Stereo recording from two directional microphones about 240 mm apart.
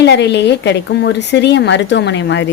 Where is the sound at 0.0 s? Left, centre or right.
Left.